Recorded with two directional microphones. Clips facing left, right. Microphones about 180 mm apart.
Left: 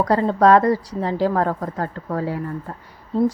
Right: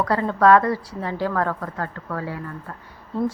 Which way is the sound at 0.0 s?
35° left (ahead or behind).